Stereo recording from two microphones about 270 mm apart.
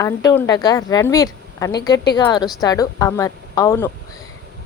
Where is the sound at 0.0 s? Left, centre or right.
Centre.